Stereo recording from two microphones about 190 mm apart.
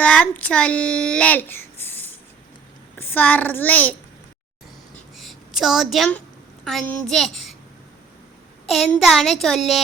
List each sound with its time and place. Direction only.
0.0 s child singing: 5° left (ahead or behind)
3.0 s a child's voice: 10° left (ahead or behind)
5.1 s a sound: centre (ahead or behind)
6.7 s a child's voice: centre (ahead or behind)
8.6 s a child's voice: centre (ahead or behind)